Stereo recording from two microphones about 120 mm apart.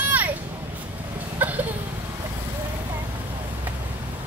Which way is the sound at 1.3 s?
15° right (ahead or behind).